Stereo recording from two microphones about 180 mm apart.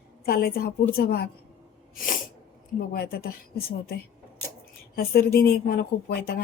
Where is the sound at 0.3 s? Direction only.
60° left (ahead or behind).